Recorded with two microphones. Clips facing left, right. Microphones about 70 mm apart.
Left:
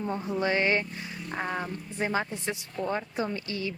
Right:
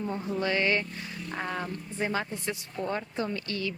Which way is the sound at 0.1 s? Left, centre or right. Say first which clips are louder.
Left 3 dB; centre.